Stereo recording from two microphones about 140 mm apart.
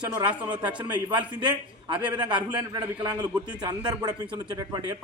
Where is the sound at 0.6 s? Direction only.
35° right (ahead or behind).